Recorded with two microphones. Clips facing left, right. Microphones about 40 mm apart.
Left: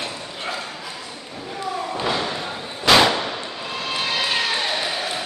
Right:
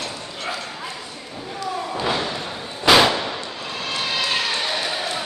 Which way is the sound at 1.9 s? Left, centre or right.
Centre.